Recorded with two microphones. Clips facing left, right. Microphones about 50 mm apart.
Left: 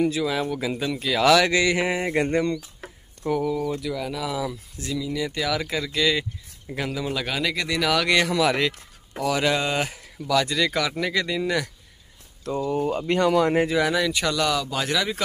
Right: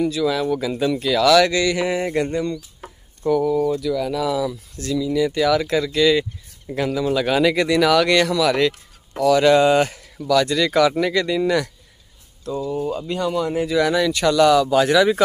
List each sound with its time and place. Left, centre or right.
0.0 s speech: left
0.7 s speech: centre
1.2 s speech: centre
4.4 s speech: centre
5.1 s speech: centre
7.2 s speech: centre
8.3 s speech: left
8.5 s speech: centre
9.5 s speech: centre
12.4 s speech: left
13.7 s speech: centre